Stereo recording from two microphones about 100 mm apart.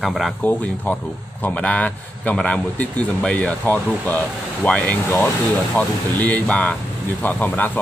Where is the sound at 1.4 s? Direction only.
15° left (ahead or behind).